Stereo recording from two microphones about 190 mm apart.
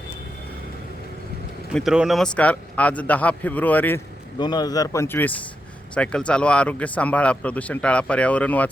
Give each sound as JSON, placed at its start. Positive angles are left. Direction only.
{"t": 1.7, "sound": "speech", "side_deg": 0}
{"t": 4.4, "sound": "speech", "side_deg": 20}